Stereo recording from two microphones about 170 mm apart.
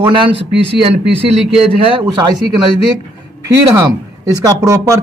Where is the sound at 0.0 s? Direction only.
30° right (ahead or behind).